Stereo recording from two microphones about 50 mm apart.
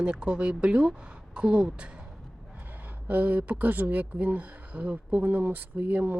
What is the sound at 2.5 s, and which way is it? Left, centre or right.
A woman's voice, right.